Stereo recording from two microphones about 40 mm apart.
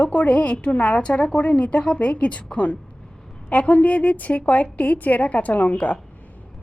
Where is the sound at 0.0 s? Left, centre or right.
Left.